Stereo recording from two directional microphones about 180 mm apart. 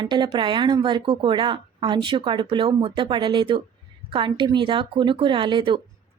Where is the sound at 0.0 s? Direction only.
25° right (ahead or behind).